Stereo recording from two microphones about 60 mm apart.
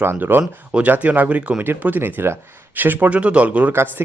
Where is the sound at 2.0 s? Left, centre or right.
Right.